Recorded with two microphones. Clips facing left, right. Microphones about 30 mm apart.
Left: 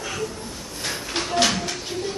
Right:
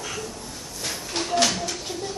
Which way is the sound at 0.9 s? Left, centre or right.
Centre.